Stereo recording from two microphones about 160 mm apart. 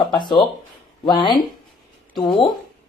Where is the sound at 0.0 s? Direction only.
30° left (ahead or behind).